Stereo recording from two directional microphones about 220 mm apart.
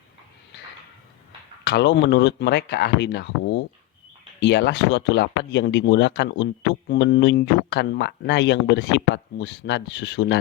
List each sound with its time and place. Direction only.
1.6 s speech: 50° left (ahead or behind)